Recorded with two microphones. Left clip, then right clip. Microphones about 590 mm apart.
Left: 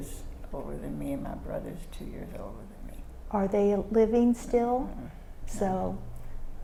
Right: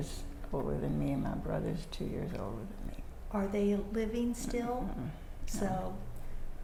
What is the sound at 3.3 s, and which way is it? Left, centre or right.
A woman's voice, left.